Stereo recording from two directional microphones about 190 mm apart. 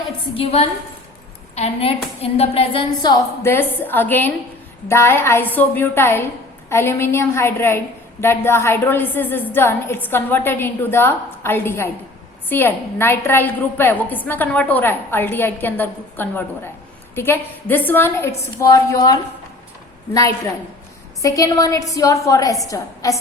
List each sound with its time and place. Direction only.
0.3 s a woman's voice: 30° left (ahead or behind); by 23.2 s 15° left (ahead or behind)